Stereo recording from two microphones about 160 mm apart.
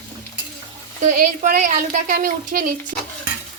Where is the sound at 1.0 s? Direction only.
55° right (ahead or behind).